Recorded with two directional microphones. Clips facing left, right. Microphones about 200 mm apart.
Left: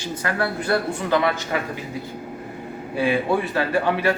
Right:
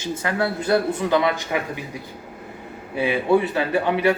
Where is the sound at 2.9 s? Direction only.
20° right (ahead or behind).